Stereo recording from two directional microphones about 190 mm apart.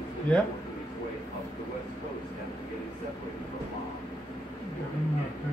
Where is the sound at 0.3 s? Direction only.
5° left (ahead or behind).